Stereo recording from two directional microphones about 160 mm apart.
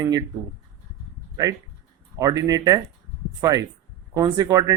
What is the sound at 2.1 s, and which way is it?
Speech, 20° right (ahead or behind).